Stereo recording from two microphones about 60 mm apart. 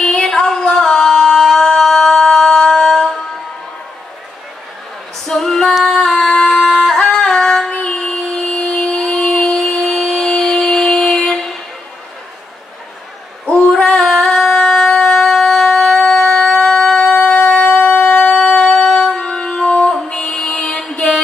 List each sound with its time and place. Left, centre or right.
0.0 s music: centre
5.2 s female singing: centre
7.7 s a sound: centre
11.0 s music: centre
13.7 s shofar: centre
16.0 s a sound: centre
17.1 s shofar: left
18.9 s music: centre